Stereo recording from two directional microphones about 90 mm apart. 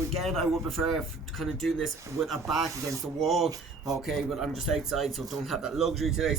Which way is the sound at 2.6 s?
35° right (ahead or behind).